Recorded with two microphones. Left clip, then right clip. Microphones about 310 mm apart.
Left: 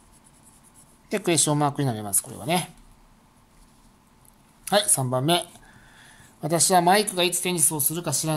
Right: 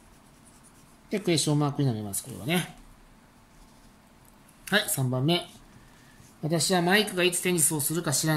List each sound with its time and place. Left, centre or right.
1.0 s speech: left
4.6 s speech: centre
6.5 s speech: centre